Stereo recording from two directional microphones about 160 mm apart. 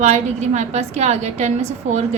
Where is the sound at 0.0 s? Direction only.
45° right (ahead or behind).